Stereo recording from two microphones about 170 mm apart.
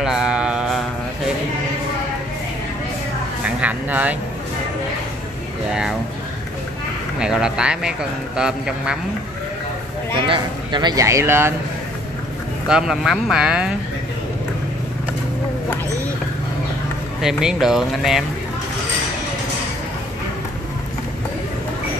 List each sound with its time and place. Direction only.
0.0 s mantra: 5° right (ahead or behind)
3.4 s a sound: 10° right (ahead or behind)
5.7 s a man's voice: 5° right (ahead or behind)
7.2 s a man's voice: 5° right (ahead or behind)
10.1 s speech: 30° right (ahead or behind); by 11.5 s 15° right (ahead or behind)
12.6 s a man's voice: 5° right (ahead or behind)
17.2 s a man's voice: 5° right (ahead or behind)